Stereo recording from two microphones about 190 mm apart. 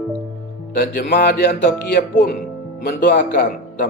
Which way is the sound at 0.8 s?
55° left (ahead or behind).